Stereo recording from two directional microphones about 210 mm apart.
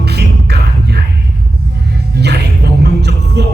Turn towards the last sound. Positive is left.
turn(degrees=-50)  # may be behind; listen again after turning